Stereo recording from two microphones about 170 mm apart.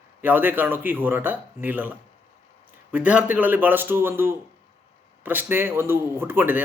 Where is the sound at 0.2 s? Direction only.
10° right (ahead or behind).